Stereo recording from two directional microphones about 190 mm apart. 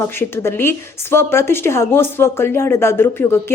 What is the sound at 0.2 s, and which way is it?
A woman's voice, 10° left (ahead or behind).